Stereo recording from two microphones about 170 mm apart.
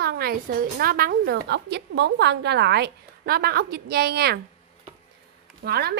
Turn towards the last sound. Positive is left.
turn(degrees=-70)  # may be behind; listen again after turning